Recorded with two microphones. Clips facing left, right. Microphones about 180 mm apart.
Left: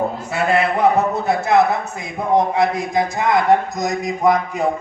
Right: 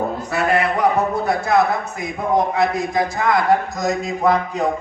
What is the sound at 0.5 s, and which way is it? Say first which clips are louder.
A man's voice: left 3 dB; 25° left (ahead or behind).